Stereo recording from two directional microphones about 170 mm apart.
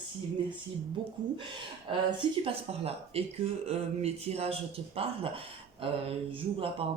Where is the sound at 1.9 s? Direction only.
30° right (ahead or behind).